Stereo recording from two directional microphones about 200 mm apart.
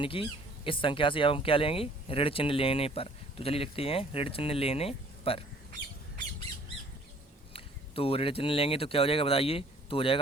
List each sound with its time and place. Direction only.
0.0 s speech: 25° left (ahead or behind)
7.5 s speech: 30° left (ahead or behind)